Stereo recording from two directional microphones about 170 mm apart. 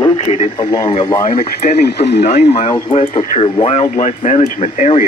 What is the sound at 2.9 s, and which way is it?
Speech, 40° left (ahead or behind).